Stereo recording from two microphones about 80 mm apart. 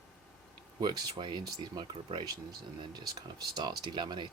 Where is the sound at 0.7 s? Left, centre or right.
Right.